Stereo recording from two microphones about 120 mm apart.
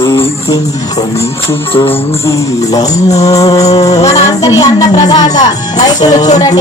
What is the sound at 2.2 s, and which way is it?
Music, 25° left (ahead or behind).